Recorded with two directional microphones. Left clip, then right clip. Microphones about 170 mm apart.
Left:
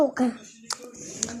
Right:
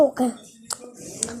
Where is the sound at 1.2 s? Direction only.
10° right (ahead or behind).